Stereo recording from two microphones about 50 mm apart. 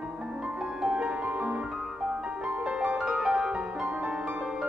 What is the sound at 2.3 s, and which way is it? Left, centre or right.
Music, right.